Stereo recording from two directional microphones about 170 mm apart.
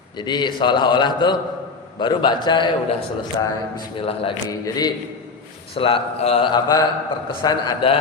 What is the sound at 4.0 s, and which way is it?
Speech, 35° left (ahead or behind).